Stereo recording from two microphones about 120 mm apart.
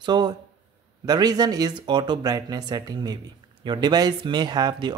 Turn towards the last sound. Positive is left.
turn(degrees=-35)  # may be behind; listen again after turning